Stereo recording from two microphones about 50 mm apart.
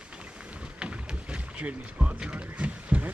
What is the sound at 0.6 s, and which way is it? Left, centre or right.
Rowboat, right.